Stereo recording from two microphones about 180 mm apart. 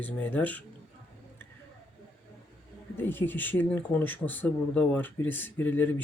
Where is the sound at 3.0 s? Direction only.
10° left (ahead or behind).